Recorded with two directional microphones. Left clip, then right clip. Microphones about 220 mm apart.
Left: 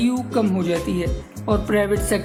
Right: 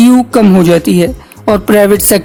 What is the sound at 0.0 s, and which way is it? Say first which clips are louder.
Speech: right 14 dB; 50° right (ahead or behind).